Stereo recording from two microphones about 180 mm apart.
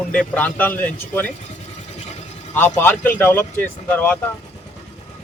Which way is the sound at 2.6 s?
10° left (ahead or behind).